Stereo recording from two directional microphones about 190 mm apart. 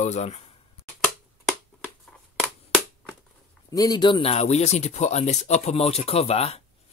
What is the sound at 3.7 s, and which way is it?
Speech, 20° left (ahead or behind).